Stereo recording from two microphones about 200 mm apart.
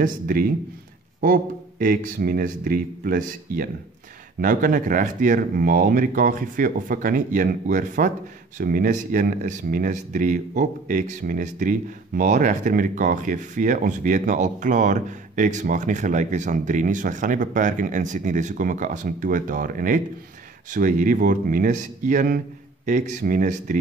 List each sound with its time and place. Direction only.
0.0 s speech: 45° right (ahead or behind)